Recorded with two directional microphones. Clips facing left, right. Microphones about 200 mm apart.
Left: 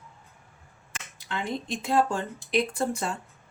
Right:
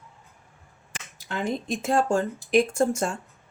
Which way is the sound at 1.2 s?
45° right (ahead or behind).